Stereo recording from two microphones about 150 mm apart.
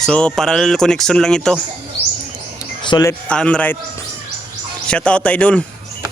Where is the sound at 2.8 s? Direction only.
30° left (ahead or behind).